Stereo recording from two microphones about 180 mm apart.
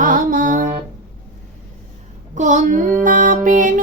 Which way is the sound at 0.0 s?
50° right (ahead or behind).